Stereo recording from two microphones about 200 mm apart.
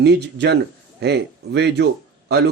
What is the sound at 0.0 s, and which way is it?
Speech, 55° right (ahead or behind).